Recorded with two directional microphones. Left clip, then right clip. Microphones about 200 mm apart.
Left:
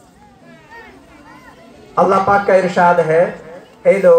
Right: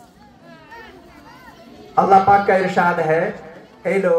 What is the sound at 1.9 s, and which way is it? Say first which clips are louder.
Speech: even; 25° right (ahead or behind).